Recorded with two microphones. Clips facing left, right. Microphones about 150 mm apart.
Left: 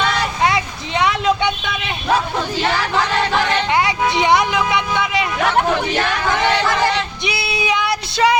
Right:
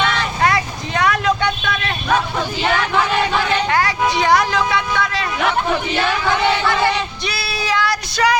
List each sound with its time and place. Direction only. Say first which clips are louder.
0.4 s vehicle: right 2 dB; 20° left (ahead or behind)
3.7 s vehicle: even; 20° left (ahead or behind)
7.3 s child singing: left 4 dB; 20° left (ahead or behind)